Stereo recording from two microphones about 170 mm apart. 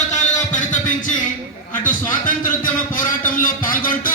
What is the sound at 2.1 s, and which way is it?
A man's voice, 50° left (ahead or behind).